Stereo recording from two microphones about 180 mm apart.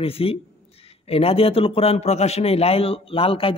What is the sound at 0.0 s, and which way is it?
A man's voice, 30° left (ahead or behind).